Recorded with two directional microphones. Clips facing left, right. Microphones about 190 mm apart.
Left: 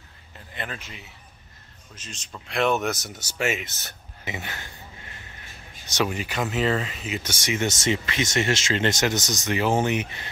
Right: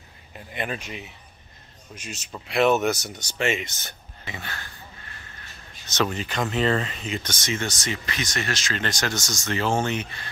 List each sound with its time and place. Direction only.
0.5 s speech: 15° right (ahead or behind); by 3.9 s centre (ahead or behind)
4.2 s speech: 20° left (ahead or behind)